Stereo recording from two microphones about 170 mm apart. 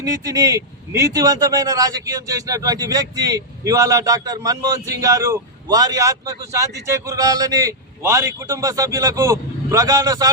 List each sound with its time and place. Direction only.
0.0 s speech: 20° right (ahead or behind)